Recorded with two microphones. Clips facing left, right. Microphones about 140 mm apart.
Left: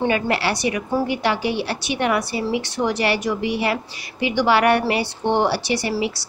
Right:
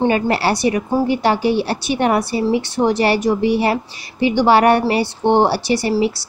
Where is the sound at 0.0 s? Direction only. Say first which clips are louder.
Right 4 dB; 35° right (ahead or behind).